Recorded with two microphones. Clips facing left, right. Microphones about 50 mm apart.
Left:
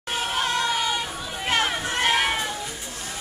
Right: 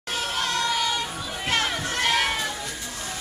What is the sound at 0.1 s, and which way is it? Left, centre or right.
Children playing, centre.